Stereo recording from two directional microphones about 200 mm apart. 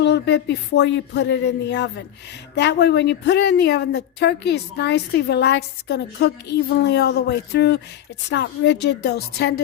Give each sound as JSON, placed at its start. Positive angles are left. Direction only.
{"t": 0.0, "sound": "a woman's voice", "side_deg": 60}